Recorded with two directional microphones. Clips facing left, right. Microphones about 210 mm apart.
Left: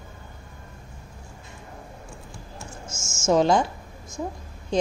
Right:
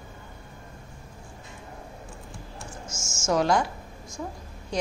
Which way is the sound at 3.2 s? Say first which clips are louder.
Left 4 dB; 25° left (ahead or behind).